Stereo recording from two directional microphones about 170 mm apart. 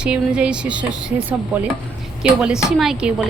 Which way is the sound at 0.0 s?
5° right (ahead or behind).